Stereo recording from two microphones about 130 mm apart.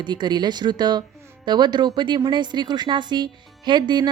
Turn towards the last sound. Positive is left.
turn(degrees=-35)  # may be behind; listen again after turning